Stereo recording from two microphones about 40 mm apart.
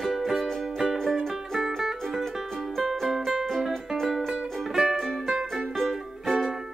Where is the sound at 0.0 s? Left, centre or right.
Centre.